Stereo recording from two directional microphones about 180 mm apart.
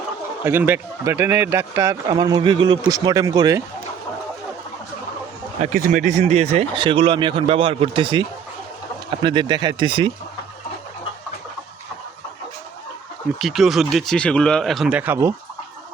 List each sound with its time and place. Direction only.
0.4 s speech: 10° right (ahead or behind)
5.6 s speech: 50° right (ahead or behind); by 8.2 s 30° right (ahead or behind)
9.2 s speech: 25° right (ahead or behind)
13.4 s speech: centre (ahead or behind)